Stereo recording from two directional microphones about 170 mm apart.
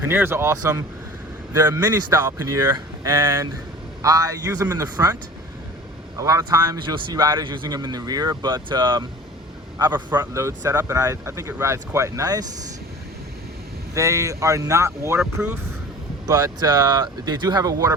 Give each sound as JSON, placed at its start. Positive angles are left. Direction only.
{"t": 0.0, "sound": "speech", "side_deg": -15}
{"t": 6.1, "sound": "speech", "side_deg": -20}
{"t": 9.9, "sound": "speech", "side_deg": -10}
{"t": 13.9, "sound": "speech", "side_deg": -20}